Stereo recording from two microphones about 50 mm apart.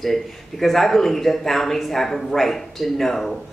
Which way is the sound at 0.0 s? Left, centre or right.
Centre.